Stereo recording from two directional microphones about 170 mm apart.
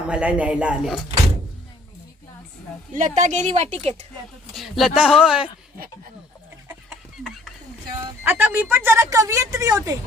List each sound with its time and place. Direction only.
0.1 s speech: 5° right (ahead or behind)
2.9 s speech: 50° right (ahead or behind)
4.5 s speech: centre (ahead or behind)
8.2 s a woman's voice: 10° right (ahead or behind)